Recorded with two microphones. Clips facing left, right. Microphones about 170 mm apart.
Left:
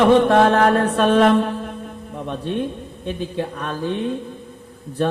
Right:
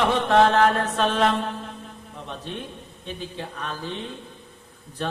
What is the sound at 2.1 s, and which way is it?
Music, 55° left (ahead or behind).